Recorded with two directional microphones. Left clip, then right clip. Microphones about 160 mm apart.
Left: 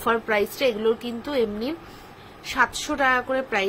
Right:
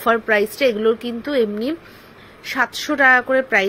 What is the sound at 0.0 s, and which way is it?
A woman's voice, 30° right (ahead or behind).